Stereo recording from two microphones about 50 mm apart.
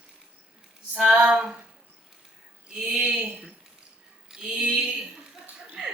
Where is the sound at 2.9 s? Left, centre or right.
Right.